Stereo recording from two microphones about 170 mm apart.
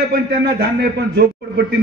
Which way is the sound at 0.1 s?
70° right (ahead or behind).